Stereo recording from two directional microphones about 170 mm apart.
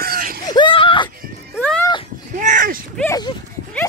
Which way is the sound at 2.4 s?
50° right (ahead or behind).